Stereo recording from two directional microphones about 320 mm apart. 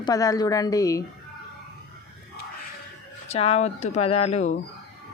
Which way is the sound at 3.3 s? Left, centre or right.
Centre.